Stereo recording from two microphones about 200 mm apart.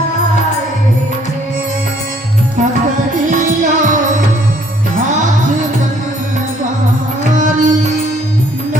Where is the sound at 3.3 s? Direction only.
40° right (ahead or behind).